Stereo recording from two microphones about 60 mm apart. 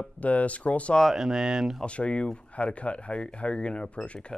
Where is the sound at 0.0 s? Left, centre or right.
Left.